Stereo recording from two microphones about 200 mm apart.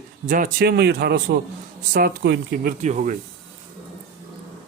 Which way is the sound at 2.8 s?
35° right (ahead or behind).